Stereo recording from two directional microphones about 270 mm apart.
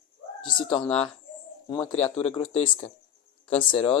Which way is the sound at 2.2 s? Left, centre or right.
Centre.